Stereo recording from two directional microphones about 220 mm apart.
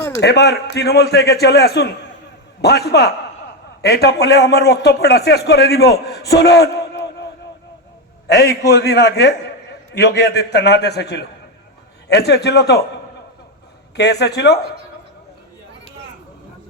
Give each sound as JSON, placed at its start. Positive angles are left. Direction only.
{"t": 0.2, "sound": "a man's voice", "side_deg": 50}
{"t": 6.1, "sound": "a sound", "side_deg": 50}
{"t": 8.3, "sound": "a man's voice", "side_deg": 50}
{"t": 13.9, "sound": "a man's voice", "side_deg": 50}